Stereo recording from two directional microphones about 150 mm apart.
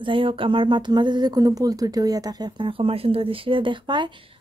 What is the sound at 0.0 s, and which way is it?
A woman's voice, 35° right (ahead or behind).